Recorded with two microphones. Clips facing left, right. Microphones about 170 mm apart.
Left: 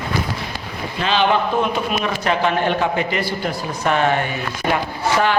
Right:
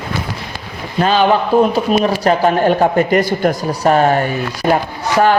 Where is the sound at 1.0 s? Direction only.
45° right (ahead or behind).